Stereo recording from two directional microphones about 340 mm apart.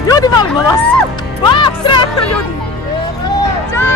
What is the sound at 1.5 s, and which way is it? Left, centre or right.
Music, centre.